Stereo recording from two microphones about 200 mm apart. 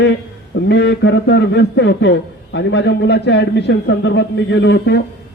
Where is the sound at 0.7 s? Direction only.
60° left (ahead or behind).